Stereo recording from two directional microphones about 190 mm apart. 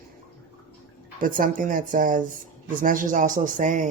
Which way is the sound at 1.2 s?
45° right (ahead or behind).